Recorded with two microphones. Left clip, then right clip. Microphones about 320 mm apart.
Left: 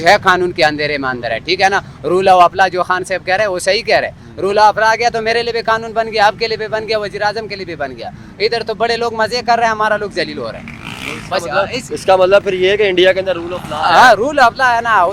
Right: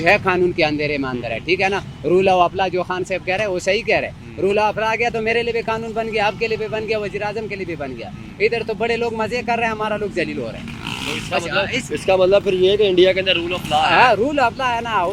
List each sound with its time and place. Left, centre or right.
0.3 s a man's voice: left
11.4 s speech: centre
12.2 s a man's voice: left
13.2 s speech: centre
13.9 s a man's voice: left